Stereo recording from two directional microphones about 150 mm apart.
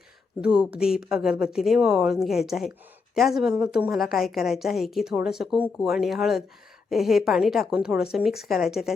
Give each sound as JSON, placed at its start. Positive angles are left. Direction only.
{"t": 0.4, "sound": "a woman's voice", "side_deg": -5}